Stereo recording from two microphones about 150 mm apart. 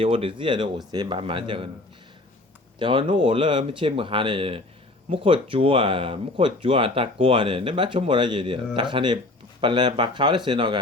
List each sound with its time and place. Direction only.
0.0 s speech: 40° right (ahead or behind)
2.7 s speech: 35° right (ahead or behind)